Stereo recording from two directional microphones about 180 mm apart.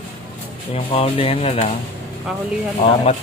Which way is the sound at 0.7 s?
35° left (ahead or behind).